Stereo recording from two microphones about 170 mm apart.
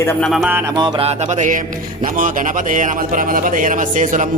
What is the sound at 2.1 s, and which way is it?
Speech, 50° right (ahead or behind).